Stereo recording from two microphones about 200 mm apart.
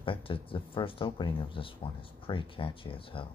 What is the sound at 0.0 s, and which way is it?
Speech, 25° left (ahead or behind).